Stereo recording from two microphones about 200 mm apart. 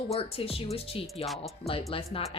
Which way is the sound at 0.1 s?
30° left (ahead or behind).